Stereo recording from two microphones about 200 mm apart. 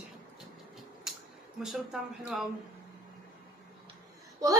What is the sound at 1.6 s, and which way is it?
Speech, 5° right (ahead or behind).